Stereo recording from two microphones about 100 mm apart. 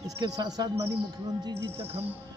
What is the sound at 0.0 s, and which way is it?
Speech, 40° right (ahead or behind).